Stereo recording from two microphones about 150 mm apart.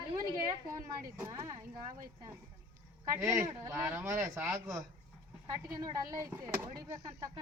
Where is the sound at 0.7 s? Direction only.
20° right (ahead or behind).